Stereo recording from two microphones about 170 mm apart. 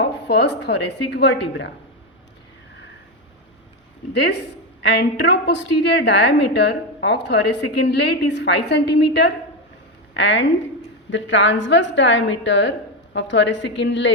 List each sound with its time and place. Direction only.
0.0 s a woman's voice: 90° left
4.1 s a woman's voice: 75° left (ahead or behind)